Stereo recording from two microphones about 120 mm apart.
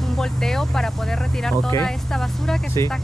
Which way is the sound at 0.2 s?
5° left (ahead or behind).